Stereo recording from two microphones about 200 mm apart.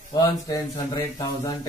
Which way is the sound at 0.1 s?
20° left (ahead or behind).